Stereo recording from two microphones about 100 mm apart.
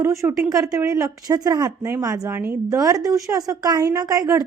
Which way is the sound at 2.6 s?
35° right (ahead or behind).